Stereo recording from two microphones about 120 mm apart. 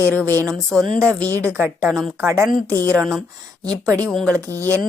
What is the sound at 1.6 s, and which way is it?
Speech, 20° right (ahead or behind).